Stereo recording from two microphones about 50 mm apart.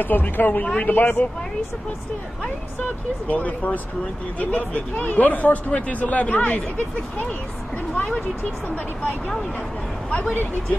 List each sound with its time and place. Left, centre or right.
0.0 s speech: left
3.3 s speech: left
7.9 s speech: left
10.3 s speech: left